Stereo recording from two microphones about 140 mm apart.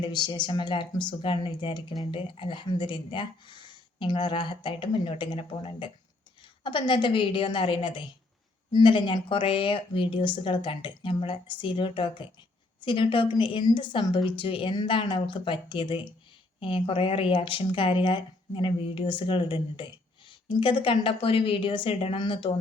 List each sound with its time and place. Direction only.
0.0 s speech: 30° left (ahead or behind)